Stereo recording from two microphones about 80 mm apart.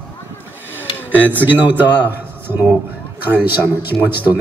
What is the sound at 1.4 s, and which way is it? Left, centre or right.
A man's voice, right.